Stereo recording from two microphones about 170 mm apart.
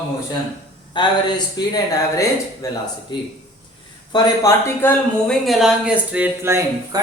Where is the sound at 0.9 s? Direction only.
25° left (ahead or behind).